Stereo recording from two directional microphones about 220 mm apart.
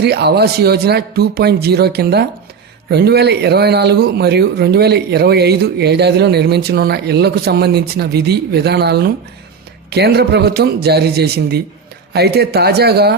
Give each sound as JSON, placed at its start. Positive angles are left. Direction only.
{"t": 0.0, "sound": "speech", "side_deg": -50}